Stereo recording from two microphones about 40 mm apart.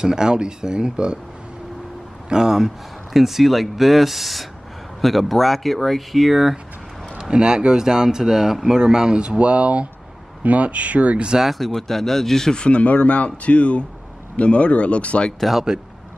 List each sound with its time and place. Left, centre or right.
0.0 s speech: centre
2.2 s speech: centre
2.5 s speech: centre
7.2 s speech: right
9.2 s speech: right
11.5 s speech: centre
12.5 s speech: left